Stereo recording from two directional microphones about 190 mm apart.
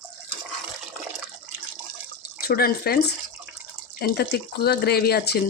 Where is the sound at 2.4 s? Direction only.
50° left (ahead or behind).